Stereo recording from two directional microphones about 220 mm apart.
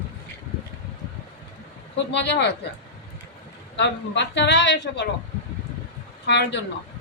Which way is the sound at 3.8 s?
50° left (ahead or behind).